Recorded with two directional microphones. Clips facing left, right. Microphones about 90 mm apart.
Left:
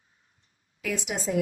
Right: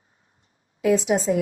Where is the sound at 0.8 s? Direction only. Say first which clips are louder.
Right 12 dB; 30° right (ahead or behind).